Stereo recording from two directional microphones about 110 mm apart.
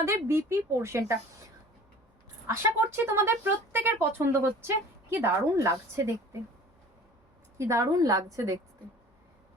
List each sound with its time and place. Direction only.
0.0 s speech: 25° right (ahead or behind)
2.5 s speech: 25° right (ahead or behind)
7.6 s speech: 30° right (ahead or behind)